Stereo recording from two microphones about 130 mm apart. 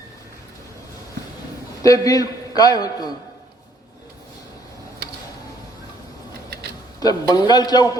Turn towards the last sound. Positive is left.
turn(degrees=30)  # may be behind; listen again after turning